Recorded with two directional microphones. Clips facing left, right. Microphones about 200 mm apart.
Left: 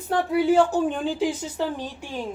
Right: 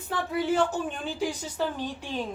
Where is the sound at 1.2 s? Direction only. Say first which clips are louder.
Left 5 dB; 20° left (ahead or behind).